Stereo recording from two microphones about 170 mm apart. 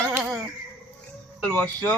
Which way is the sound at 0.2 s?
5° right (ahead or behind).